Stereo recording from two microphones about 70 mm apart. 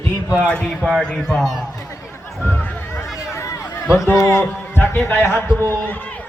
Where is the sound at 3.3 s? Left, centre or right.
Left.